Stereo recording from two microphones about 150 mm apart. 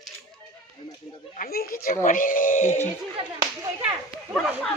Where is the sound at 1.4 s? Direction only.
80° left; by 2.7 s 60° left (ahead or behind).